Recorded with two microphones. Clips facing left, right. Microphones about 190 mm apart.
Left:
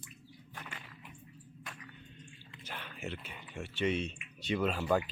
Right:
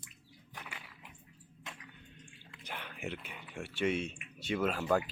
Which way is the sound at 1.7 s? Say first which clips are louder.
Right 1 dB; 25° right (ahead or behind).